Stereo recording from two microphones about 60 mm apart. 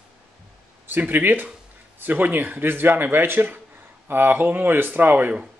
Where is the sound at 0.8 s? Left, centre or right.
Right.